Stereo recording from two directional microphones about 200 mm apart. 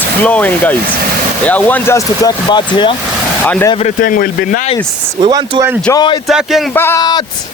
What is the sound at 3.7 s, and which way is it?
Speech, 40° left (ahead or behind).